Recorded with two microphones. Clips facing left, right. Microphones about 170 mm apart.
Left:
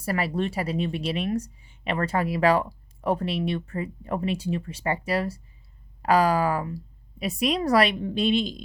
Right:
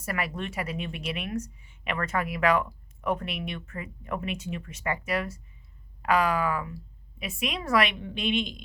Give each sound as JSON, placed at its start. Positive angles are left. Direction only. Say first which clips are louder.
{"t": 0.0, "sound": "a woman's voice", "louder": "left 6 dB", "side_deg": 30}